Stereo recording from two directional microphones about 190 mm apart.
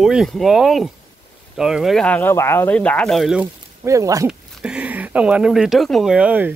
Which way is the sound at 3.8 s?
15° right (ahead or behind).